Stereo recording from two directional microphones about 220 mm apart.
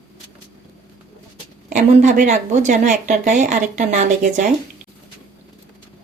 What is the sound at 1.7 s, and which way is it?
Speech, 35° right (ahead or behind).